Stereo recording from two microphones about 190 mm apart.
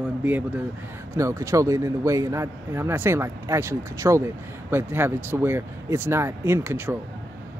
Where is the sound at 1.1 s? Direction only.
15° right (ahead or behind).